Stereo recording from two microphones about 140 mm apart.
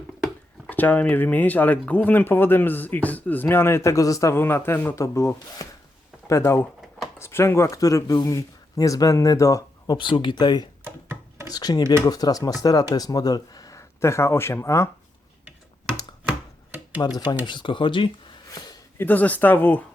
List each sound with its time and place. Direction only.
0.7 s speech: 10° left (ahead or behind); by 10.7 s 30° left (ahead or behind)
10.8 s a sound: 15° right (ahead or behind)
11.4 s speech: 30° left (ahead or behind)
17.0 s speech: 25° left (ahead or behind)
17.4 s speech: 35° left (ahead or behind)
18.9 s speech: 15° left (ahead or behind)